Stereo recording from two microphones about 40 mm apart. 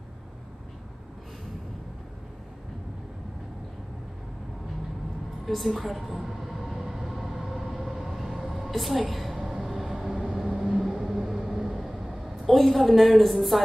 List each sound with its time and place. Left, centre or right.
5.4 s a woman's voice: centre
5.9 s train: centre
9.1 s a sound: centre
10.1 s vehicle: centre
10.7 s vehicle: centre
12.4 s a woman's voice: centre